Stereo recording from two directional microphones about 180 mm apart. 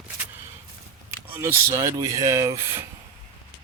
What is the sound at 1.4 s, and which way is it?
Speech, 15° right (ahead or behind).